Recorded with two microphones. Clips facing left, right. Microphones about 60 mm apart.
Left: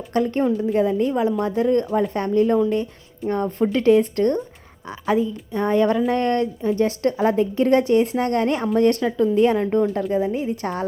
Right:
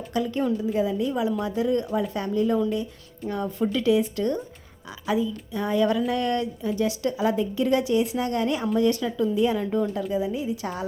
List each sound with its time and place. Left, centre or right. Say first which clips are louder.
0.1 s a woman's voice: left 5 dB; left